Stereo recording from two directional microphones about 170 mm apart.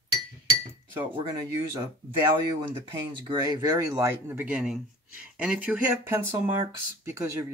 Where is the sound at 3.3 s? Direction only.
25° right (ahead or behind).